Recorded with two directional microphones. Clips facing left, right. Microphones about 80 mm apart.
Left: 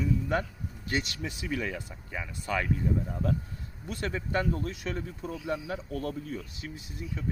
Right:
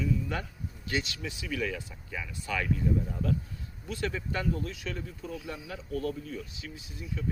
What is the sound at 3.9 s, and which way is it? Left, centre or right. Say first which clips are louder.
Speech: left 2 dB; left.